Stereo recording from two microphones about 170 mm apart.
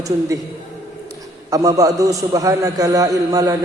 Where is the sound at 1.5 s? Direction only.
20° right (ahead or behind).